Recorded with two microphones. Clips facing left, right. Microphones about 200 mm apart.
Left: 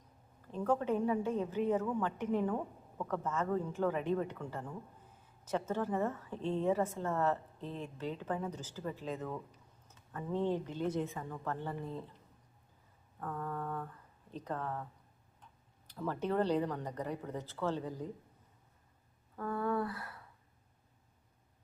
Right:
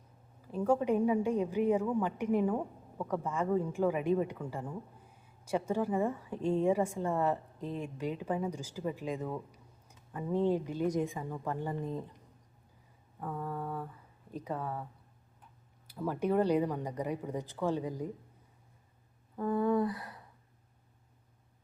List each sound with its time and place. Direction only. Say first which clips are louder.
0.4 s a woman's voice: right 4 dB; 10° right (ahead or behind)
13.1 s speech: right 2 dB; 10° right (ahead or behind)
15.9 s a woman's voice: right 4 dB; 10° right (ahead or behind)
19.4 s a woman's voice: right 6 dB; 20° right (ahead or behind)